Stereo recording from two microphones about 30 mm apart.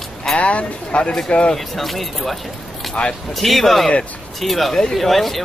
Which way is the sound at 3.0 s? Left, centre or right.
Left.